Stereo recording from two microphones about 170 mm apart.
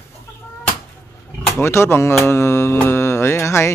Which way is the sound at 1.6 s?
15° left (ahead or behind).